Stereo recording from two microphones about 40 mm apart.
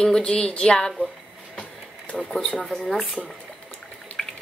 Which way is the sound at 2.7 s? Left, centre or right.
Centre.